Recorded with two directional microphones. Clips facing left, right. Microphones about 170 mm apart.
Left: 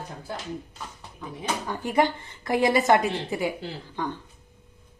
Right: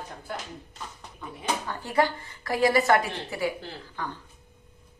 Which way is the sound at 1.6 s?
15° left (ahead or behind).